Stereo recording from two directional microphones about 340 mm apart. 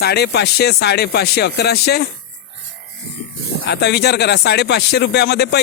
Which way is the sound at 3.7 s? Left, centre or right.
Left.